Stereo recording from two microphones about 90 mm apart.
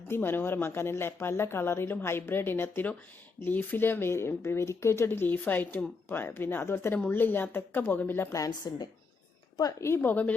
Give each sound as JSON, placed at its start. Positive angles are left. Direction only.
{"t": 0.1, "sound": "speech", "side_deg": 25}
{"t": 8.4, "sound": "a woman's voice", "side_deg": 50}
{"t": 9.8, "sound": "speech", "side_deg": 25}